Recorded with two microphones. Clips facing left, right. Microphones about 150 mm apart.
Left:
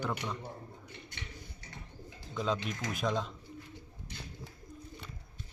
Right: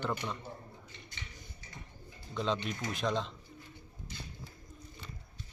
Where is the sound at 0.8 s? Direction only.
60° left (ahead or behind).